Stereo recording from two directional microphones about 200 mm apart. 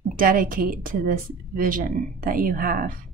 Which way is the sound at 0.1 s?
45° right (ahead or behind).